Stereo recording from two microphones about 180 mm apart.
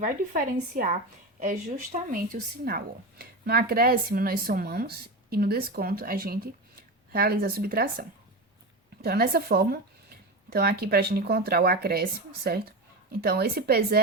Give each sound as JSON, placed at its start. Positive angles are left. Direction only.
{"t": 0.0, "sound": "speech", "side_deg": -50}
{"t": 9.0, "sound": "speech", "side_deg": -60}